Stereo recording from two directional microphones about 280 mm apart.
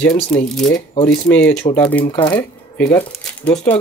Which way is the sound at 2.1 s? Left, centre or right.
Centre.